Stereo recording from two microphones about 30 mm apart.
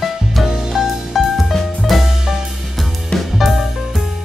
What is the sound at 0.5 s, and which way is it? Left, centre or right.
Music, centre.